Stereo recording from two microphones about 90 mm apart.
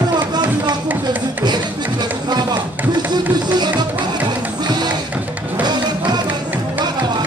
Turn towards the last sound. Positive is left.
turn(degrees=-50)  # may be behind; listen again after turning